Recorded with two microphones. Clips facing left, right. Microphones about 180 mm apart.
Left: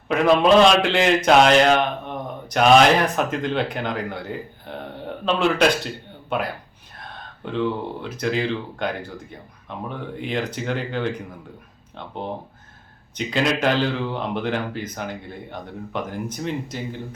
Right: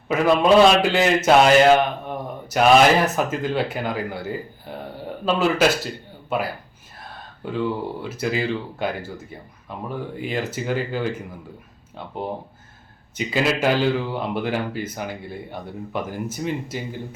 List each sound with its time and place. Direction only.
0.1 s a man's voice: 5° right (ahead or behind)
7.4 s a man's voice: 5° right (ahead or behind)
13.1 s speech: 5° right (ahead or behind)